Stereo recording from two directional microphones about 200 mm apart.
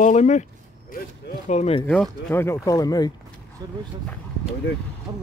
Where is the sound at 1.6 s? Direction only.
25° left (ahead or behind).